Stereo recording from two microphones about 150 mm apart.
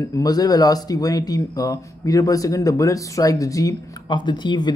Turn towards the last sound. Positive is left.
turn(degrees=30)  # may be behind; listen again after turning